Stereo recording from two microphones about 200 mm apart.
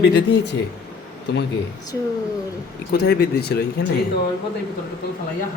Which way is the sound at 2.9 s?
55° left (ahead or behind).